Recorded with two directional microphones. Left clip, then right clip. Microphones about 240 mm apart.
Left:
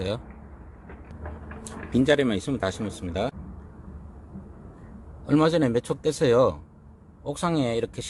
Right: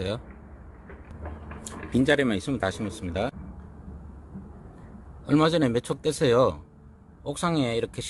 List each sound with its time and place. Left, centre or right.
1.9 s speech: centre
5.2 s speech: centre